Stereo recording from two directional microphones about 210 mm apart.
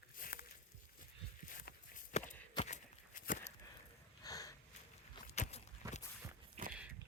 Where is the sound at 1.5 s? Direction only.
40° left (ahead or behind).